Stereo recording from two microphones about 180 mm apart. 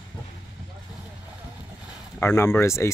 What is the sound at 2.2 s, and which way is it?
Speech, 15° left (ahead or behind).